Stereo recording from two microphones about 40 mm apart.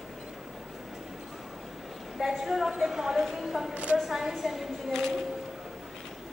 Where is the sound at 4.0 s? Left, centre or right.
Centre.